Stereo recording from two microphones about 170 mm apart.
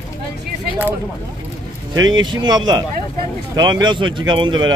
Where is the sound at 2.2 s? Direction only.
25° right (ahead or behind).